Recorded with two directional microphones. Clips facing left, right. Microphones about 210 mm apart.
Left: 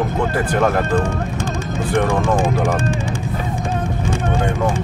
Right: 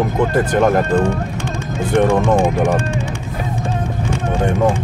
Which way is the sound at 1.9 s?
20° right (ahead or behind).